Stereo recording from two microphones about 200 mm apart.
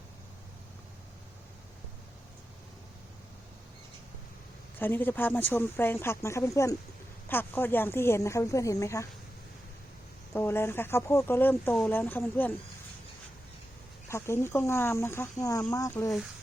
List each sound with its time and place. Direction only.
4.8 s speech: 10° left (ahead or behind)
10.3 s speech: 10° left (ahead or behind)
14.1 s speech: 15° left (ahead or behind)